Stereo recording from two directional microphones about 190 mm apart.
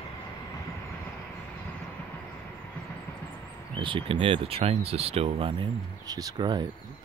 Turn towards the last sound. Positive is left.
turn(degrees=-25)  # may be behind; listen again after turning